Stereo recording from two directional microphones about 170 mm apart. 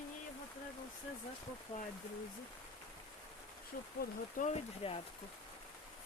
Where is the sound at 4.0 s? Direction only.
45° left (ahead or behind).